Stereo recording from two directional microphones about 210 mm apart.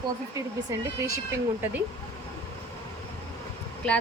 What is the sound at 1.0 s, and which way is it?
Speech, 15° right (ahead or behind).